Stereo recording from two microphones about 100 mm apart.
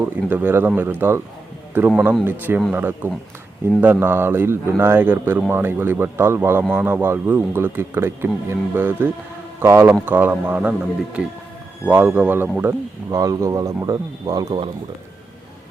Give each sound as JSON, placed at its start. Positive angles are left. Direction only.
{"t": 0.0, "sound": "speech", "side_deg": -20}
{"t": 13.1, "sound": "speech", "side_deg": -35}